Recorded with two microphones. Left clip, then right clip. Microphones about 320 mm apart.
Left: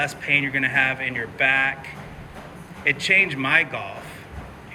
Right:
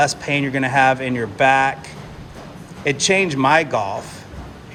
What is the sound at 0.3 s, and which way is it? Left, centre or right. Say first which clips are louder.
Speech: right 3 dB; right.